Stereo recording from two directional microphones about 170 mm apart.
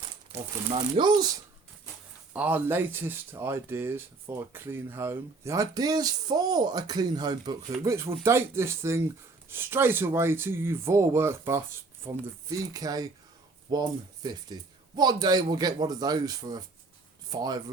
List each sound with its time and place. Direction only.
0.7 s speech: 30° right (ahead or behind)
2.3 s speech: 10° right (ahead or behind)